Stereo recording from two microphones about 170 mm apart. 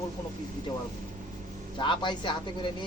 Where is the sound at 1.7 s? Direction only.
30° left (ahead or behind).